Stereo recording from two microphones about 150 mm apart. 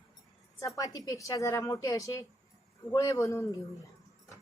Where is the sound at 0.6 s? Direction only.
20° left (ahead or behind).